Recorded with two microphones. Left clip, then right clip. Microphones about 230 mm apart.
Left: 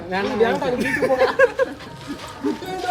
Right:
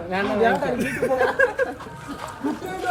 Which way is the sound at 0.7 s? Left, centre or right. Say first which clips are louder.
Left 4 dB; left.